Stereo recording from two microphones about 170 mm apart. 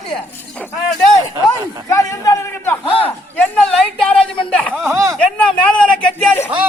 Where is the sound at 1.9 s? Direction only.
20° left (ahead or behind).